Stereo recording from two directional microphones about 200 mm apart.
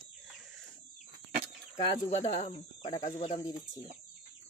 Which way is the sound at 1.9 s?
30° left (ahead or behind).